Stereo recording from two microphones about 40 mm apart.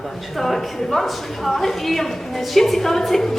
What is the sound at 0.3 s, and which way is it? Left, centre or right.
A woman's voice, centre.